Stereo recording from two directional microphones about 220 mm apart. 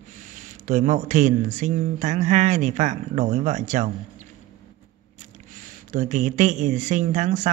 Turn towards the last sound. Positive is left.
turn(degrees=-30)  # may be behind; listen again after turning